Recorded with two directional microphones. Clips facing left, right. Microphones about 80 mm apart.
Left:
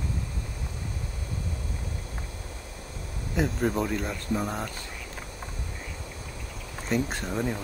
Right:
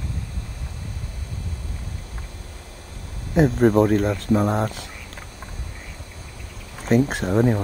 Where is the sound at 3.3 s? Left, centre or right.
Right.